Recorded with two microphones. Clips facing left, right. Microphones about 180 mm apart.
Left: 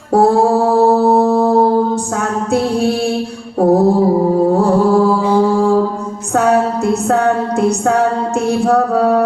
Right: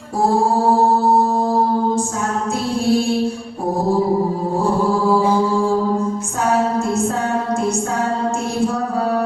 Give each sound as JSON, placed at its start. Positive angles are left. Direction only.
{"t": 0.1, "sound": "music", "side_deg": 65}
{"t": 1.0, "sound": "a sound", "side_deg": 65}
{"t": 8.6, "sound": "child singing", "side_deg": 65}